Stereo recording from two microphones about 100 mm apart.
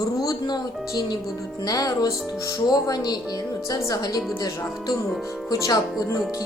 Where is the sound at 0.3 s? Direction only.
45° left (ahead or behind).